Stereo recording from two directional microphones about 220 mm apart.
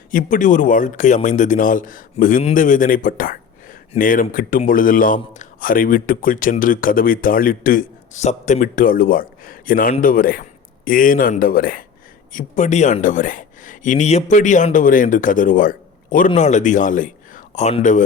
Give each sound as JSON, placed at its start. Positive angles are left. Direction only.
{"t": 0.1, "sound": "speech", "side_deg": 35}